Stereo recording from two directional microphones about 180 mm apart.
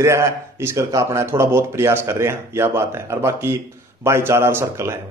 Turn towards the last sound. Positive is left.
turn(degrees=-15)  # may be behind; listen again after turning